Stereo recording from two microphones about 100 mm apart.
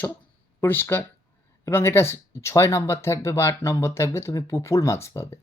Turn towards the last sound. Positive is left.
turn(degrees=25)  # may be behind; listen again after turning